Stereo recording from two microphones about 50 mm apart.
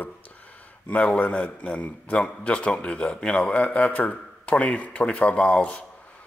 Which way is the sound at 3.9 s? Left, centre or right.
Left.